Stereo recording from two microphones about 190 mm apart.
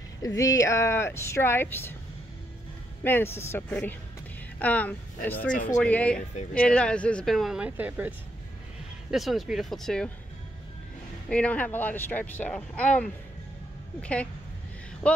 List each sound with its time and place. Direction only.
0.2 s speech: 15° left (ahead or behind)
3.0 s speech: 10° left (ahead or behind)
5.5 s speech: 45° left (ahead or behind)
5.8 s speech: 5° left (ahead or behind); by 8.1 s 10° right (ahead or behind)
9.1 s speech: centre (ahead or behind)
11.2 s speech: 5° left (ahead or behind)
15.0 s speech: 5° left (ahead or behind)